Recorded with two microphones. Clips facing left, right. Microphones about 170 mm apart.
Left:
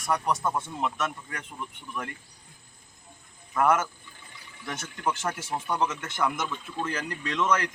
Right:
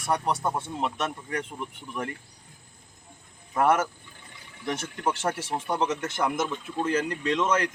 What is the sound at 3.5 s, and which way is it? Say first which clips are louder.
Speech: right 1 dB; 30° right (ahead or behind).